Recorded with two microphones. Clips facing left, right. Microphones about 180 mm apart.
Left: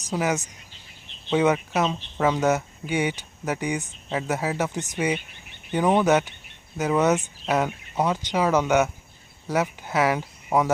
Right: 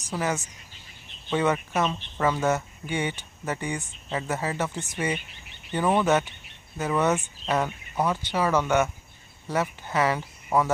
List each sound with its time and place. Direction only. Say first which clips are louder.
0.1 s speech: left 3 dB; 15° left (ahead or behind)